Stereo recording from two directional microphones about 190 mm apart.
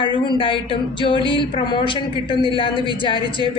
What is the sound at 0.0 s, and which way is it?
A man's voice, 25° left (ahead or behind).